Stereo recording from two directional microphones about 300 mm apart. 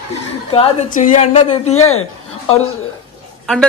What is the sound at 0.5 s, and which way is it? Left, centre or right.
A woman's voice, centre.